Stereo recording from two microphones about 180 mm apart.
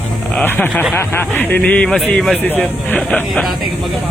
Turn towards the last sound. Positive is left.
turn(degrees=5)  # may be behind; listen again after turning